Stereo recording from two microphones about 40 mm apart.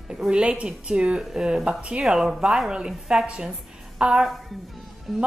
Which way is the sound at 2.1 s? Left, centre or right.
Centre.